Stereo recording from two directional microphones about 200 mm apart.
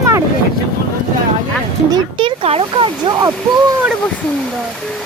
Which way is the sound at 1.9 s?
25° right (ahead or behind).